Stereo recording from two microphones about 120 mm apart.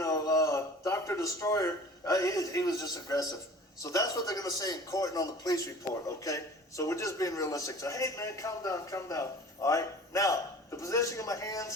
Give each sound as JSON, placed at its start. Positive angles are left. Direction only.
{"t": 0.0, "sound": "a man's voice", "side_deg": 30}